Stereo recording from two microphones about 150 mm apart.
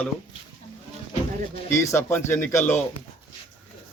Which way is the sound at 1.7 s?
15° left (ahead or behind).